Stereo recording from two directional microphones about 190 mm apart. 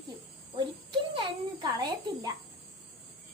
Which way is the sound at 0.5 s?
25° right (ahead or behind).